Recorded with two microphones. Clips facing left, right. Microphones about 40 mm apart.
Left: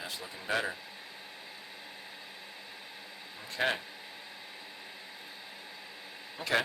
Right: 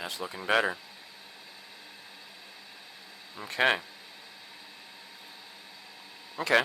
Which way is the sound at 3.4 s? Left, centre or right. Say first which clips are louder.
Right 6 dB; right.